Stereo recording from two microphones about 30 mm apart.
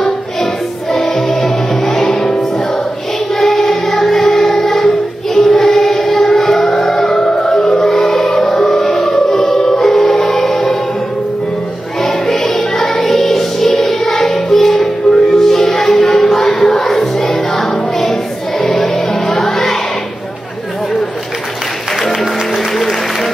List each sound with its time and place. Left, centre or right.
0.9 s music: centre
3.3 s music: centre
4.2 s music: centre
4.5 s choir: centre
5.5 s music: centre
7.7 s choir: centre
8.8 s music: centre
12.3 s music: centre